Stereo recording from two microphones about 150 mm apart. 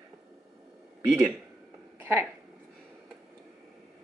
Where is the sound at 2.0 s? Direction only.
15° right (ahead or behind).